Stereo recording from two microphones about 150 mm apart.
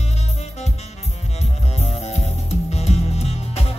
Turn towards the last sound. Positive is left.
turn(degrees=45)  # may be behind; listen again after turning